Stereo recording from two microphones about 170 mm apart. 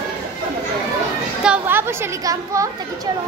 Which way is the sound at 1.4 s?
10° right (ahead or behind).